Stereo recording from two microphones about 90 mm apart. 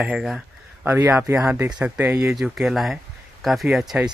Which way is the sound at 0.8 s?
25° right (ahead or behind).